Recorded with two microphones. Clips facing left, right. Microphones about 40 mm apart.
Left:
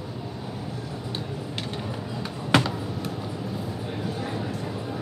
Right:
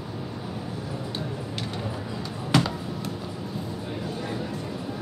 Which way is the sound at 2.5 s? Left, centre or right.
Left.